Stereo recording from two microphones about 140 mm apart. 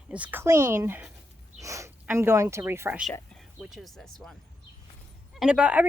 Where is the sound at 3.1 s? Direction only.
Centre (ahead or behind).